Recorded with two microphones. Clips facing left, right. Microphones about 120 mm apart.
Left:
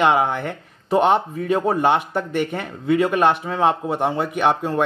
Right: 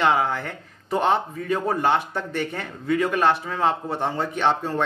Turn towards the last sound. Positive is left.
turn(degrees=15)  # may be behind; listen again after turning